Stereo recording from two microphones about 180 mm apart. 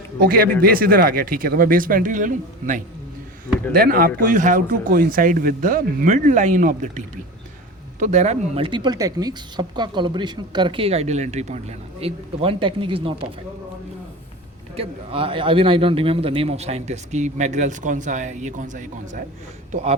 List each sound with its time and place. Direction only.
0.2 s a woman's voice: 55° right (ahead or behind); by 13.1 s 30° right (ahead or behind)
14.8 s a man's voice: 30° right (ahead or behind)